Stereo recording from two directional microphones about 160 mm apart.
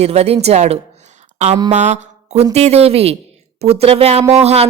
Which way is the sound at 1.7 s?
45° right (ahead or behind).